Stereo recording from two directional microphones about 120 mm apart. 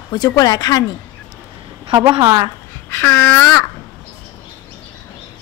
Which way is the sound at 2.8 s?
20° left (ahead or behind).